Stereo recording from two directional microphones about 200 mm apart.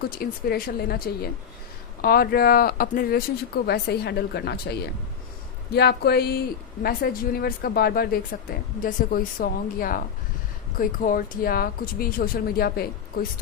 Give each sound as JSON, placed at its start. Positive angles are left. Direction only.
{"t": 0.0, "sound": "speech", "side_deg": 50}